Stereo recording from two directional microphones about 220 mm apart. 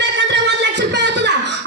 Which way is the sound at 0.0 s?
55° right (ahead or behind).